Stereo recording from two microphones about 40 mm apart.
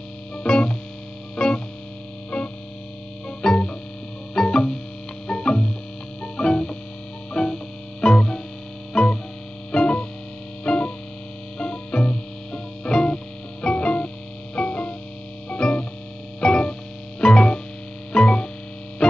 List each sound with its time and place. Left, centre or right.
0.4 s music: left